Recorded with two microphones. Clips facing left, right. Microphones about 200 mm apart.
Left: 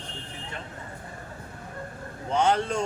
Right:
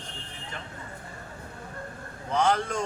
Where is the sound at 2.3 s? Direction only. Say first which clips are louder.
Left 1 dB; 25° left (ahead or behind).